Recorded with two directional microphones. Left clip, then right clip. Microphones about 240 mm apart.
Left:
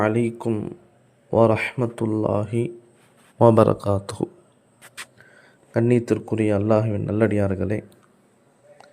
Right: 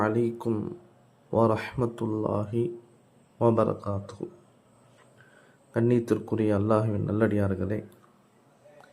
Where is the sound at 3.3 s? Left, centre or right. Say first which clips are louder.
Left 9 dB; left.